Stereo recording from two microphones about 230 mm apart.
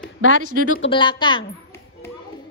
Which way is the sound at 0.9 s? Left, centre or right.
Centre.